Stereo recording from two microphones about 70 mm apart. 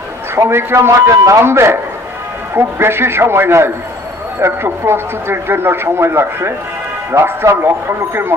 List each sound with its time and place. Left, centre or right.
0.4 s speech: right